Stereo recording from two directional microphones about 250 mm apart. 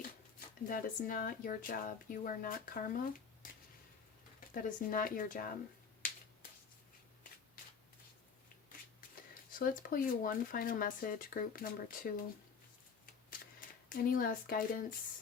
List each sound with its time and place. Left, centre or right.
0.3 s speech: left
9.5 s speech: left
13.9 s speech: left